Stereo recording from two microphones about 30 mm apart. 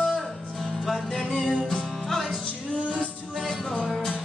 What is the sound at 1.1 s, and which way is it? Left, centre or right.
Music, left.